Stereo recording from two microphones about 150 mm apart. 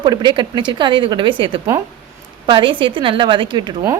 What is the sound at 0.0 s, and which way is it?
A woman's voice, 30° right (ahead or behind).